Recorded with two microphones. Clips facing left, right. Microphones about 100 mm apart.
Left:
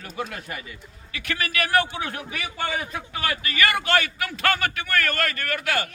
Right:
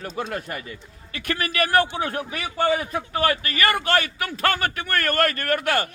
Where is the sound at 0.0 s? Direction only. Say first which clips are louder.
Right 4 dB; 40° right (ahead or behind).